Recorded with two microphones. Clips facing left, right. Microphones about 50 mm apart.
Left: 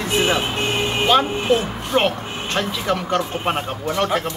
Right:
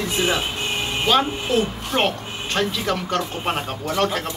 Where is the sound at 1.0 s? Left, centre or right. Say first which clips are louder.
Left 3 dB; centre.